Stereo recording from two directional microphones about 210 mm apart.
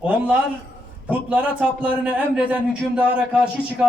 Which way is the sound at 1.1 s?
5° right (ahead or behind).